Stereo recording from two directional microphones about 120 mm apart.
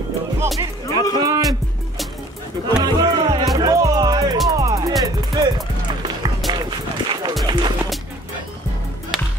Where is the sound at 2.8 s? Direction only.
35° right (ahead or behind).